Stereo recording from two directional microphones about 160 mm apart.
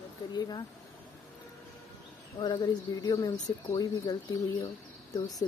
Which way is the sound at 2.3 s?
30° left (ahead or behind).